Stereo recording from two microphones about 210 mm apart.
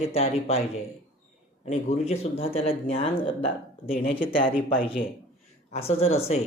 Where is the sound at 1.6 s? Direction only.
35° left (ahead or behind).